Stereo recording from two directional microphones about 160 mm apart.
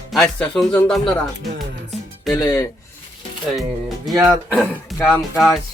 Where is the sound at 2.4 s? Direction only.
20° left (ahead or behind).